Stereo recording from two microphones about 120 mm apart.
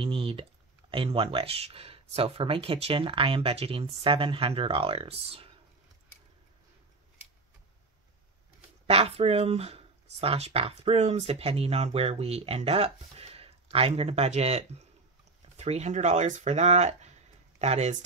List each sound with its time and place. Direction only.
0.0 s speech: 50° right (ahead or behind)
8.8 s speech: 60° right (ahead or behind)